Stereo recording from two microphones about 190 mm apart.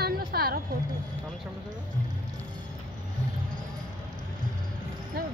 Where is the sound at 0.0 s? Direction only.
55° right (ahead or behind).